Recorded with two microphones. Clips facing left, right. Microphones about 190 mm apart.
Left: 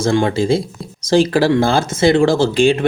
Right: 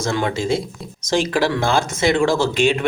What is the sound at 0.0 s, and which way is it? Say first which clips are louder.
Speech: left 6 dB; 30° left (ahead or behind).